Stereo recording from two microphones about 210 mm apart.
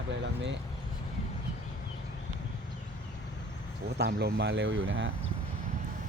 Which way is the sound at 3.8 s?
50° right (ahead or behind).